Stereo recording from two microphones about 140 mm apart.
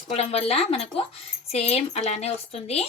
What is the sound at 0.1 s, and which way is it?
Speech, 45° left (ahead or behind).